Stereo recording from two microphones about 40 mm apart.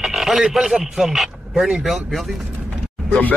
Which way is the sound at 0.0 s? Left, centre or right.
Centre.